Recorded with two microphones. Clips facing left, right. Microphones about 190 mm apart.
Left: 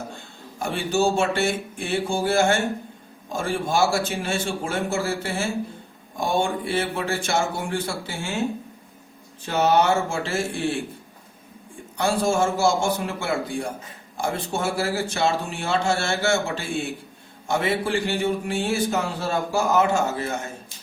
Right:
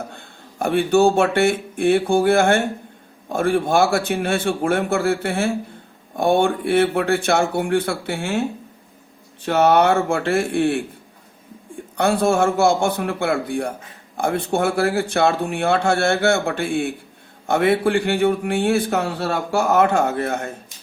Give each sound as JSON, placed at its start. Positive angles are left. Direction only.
{"t": 0.2, "sound": "a man's voice", "side_deg": -55}
{"t": 9.5, "sound": "a man's voice", "side_deg": -60}
{"t": 11.9, "sound": "a man's voice", "side_deg": -60}